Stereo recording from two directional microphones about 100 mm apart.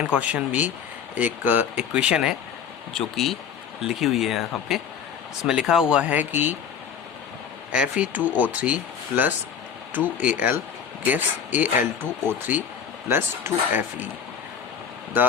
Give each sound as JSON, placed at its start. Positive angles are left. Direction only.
{"t": 0.1, "sound": "speech", "side_deg": -15}
{"t": 2.9, "sound": "speech", "side_deg": 0}
{"t": 7.7, "sound": "speech", "side_deg": -10}